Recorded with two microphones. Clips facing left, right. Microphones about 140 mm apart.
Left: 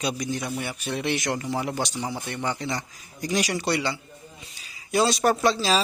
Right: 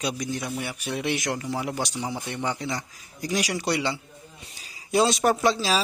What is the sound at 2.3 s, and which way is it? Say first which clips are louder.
A man's voice: left 1 dB; 15° right (ahead or behind).